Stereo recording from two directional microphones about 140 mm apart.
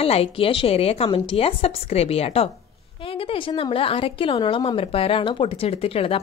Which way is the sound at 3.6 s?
40° left (ahead or behind).